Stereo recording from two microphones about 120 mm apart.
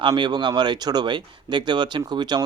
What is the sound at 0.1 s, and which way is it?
Speech, 40° right (ahead or behind).